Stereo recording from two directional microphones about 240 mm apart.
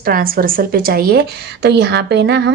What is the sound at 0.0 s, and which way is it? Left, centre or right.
A woman's voice, right.